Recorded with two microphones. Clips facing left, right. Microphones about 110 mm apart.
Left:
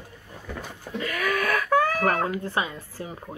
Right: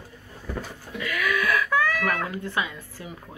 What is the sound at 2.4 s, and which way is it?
Speech, 35° left (ahead or behind).